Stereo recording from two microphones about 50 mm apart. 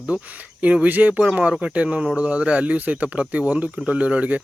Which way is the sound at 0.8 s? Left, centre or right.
Right.